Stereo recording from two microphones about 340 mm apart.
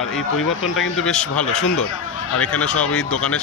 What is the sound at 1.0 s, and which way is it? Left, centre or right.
Speech, centre.